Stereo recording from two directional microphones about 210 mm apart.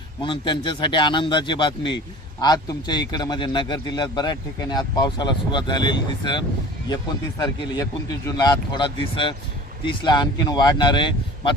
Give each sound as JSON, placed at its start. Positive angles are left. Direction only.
{"t": 0.2, "sound": "a man's voice", "side_deg": 25}